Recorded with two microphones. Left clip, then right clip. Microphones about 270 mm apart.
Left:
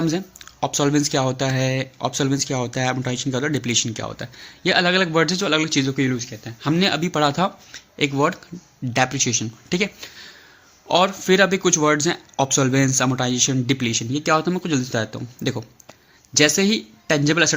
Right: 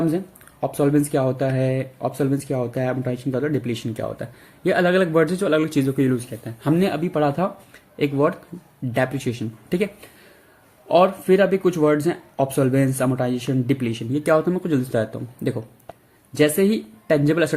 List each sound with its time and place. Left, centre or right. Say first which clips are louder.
0.6 s speech: even; left